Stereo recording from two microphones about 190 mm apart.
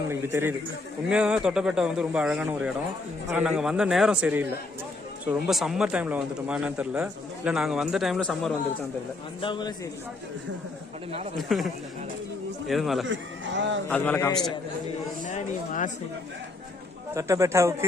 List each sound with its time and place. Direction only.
0.1 s a man's voice: 10° right (ahead or behind)
9.4 s a man's voice: 25° left (ahead or behind)
11.3 s speech: centre (ahead or behind)
13.1 s speech: 70° right (ahead or behind)
13.9 s a man's voice: 10° left (ahead or behind)
15.2 s speech: 40° left (ahead or behind)
17.2 s a man's voice: 15° right (ahead or behind)